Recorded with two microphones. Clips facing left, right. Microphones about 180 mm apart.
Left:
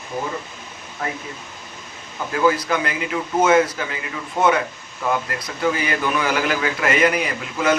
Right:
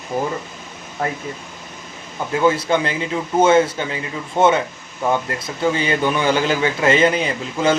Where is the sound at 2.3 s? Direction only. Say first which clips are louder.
Right 2 dB; 25° right (ahead or behind).